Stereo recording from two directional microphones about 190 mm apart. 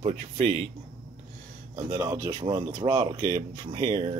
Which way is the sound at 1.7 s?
20° right (ahead or behind).